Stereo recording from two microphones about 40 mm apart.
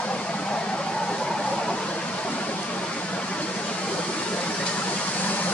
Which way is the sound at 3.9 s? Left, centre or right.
Left.